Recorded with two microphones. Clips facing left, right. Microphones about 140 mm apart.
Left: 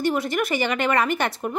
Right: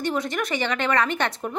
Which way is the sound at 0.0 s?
5° left (ahead or behind).